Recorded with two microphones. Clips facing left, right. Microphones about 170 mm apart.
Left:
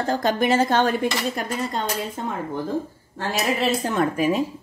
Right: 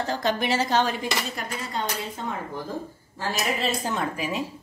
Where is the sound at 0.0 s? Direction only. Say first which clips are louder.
Left 4 dB; 45° left (ahead or behind).